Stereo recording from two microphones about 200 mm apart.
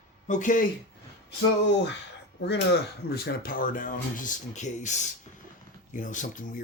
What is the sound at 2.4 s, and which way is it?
Speech, 55° left (ahead or behind).